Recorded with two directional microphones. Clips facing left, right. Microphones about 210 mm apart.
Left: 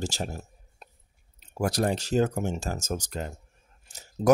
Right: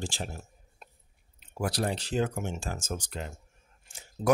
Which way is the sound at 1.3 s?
45° left (ahead or behind).